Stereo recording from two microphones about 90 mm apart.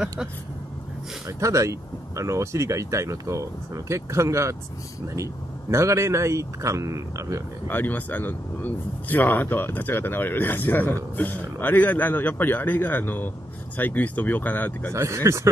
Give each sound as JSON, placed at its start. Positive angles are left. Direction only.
{"t": 1.2, "sound": "speech", "side_deg": -35}
{"t": 7.6, "sound": "speech", "side_deg": 20}
{"t": 14.9, "sound": "speech", "side_deg": -30}